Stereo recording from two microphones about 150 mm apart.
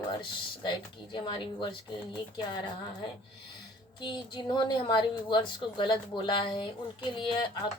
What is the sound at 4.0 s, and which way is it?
Speech, 30° left (ahead or behind).